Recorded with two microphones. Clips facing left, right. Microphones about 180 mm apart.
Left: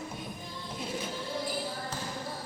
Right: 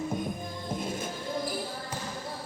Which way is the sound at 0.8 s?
50° right (ahead or behind).